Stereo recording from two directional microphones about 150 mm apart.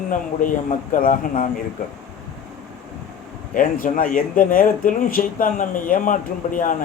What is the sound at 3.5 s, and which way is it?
Speech, 65° left (ahead or behind).